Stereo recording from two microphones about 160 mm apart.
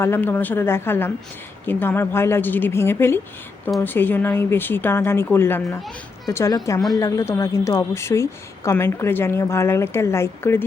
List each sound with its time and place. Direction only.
0.0 s a woman's voice: 15° left (ahead or behind)